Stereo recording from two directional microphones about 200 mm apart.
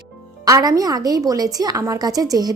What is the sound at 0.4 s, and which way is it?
A woman's voice, 15° right (ahead or behind).